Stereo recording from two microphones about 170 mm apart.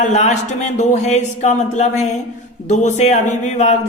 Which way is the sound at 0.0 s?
45° left (ahead or behind).